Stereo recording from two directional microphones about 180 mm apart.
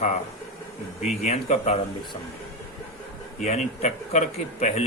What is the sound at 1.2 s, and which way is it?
Speech, 40° left (ahead or behind).